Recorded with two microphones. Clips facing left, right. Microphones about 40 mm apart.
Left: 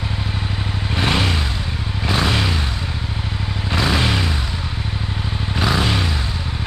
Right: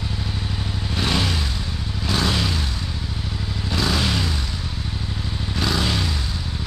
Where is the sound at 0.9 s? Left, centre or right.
Left.